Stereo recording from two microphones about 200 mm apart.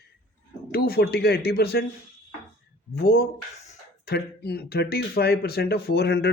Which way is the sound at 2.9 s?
50° left (ahead or behind).